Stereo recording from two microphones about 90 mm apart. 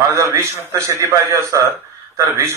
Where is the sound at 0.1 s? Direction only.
35° right (ahead or behind).